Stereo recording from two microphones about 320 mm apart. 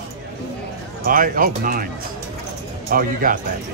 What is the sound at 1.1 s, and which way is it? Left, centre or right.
Speech, right.